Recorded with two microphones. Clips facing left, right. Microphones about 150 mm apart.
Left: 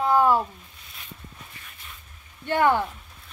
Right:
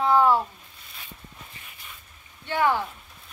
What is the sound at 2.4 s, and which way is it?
Speech, 50° left (ahead or behind).